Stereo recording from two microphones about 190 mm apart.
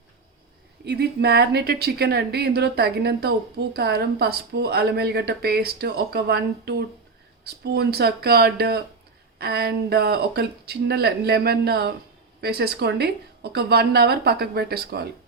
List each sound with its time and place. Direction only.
0.9 s speech: 60° right (ahead or behind)